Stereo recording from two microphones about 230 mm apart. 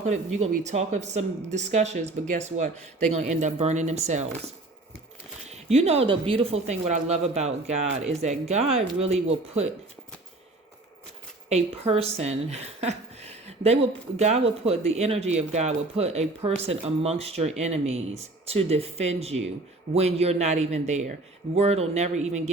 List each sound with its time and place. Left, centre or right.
0.0 s speech: right
5.5 s speech: right
11.4 s speech: right